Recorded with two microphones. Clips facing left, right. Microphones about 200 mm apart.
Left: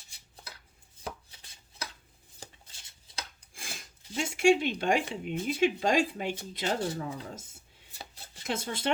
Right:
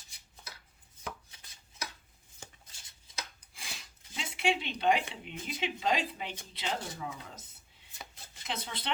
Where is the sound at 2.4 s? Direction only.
35° left (ahead or behind).